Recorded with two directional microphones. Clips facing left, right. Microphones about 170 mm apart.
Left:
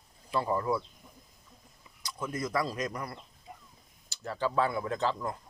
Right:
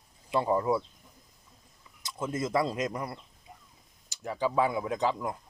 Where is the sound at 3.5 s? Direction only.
60° left (ahead or behind).